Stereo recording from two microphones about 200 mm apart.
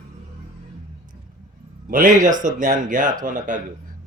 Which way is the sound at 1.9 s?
40° right (ahead or behind).